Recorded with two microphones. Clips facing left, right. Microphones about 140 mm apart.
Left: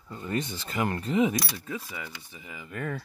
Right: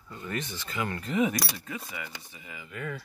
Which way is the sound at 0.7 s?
40° left (ahead or behind).